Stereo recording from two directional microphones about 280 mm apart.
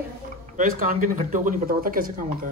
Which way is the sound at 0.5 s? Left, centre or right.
Right.